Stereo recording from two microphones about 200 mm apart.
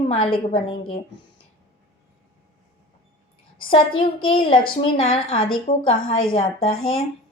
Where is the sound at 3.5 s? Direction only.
25° left (ahead or behind).